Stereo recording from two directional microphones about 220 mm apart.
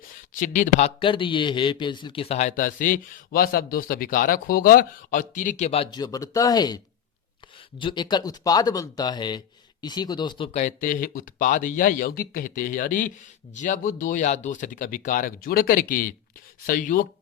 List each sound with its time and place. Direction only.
0.3 s a man's voice: 35° left (ahead or behind)
1.0 s a man's voice: 20° left (ahead or behind)
7.8 s a man's voice: 20° left (ahead or behind); by 17.1 s 40° left (ahead or behind)